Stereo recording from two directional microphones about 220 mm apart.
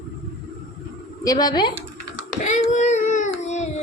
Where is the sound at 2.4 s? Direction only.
30° left (ahead or behind).